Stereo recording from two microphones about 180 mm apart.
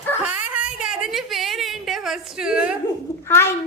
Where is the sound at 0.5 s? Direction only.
5° right (ahead or behind).